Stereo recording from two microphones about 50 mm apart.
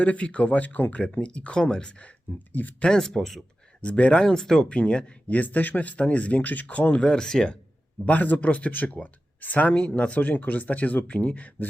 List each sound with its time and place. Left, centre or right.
0.0 s speech: left
2.5 s speech: left
2.8 s speech: centre
3.8 s speech: left
5.4 s speech: left
6.9 s speech: centre
8.0 s speech: left